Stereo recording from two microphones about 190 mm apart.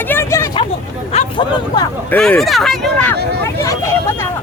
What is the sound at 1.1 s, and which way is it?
Speech, 35° left (ahead or behind).